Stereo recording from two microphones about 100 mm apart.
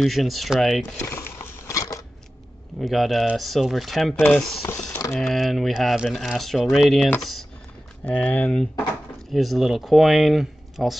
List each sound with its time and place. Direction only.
0.0 s speech: centre (ahead or behind)
1.0 s biting: 25° left (ahead or behind)
2.8 s speech: centre (ahead or behind)
4.6 s a sound: 35° left (ahead or behind)
5.1 s speech: centre (ahead or behind)
8.0 s speech: 15° left (ahead or behind)
9.3 s speech: centre (ahead or behind)